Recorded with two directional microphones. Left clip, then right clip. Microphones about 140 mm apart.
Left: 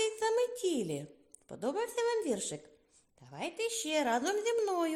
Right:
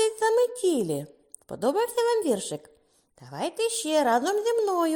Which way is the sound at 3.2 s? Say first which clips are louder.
Right 9 dB; 50° right (ahead or behind).